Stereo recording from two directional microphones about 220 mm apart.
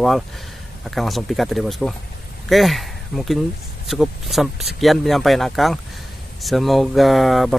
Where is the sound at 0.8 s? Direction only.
Centre (ahead or behind).